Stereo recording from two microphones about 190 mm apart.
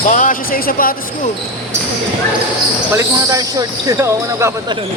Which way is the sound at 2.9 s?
15° right (ahead or behind).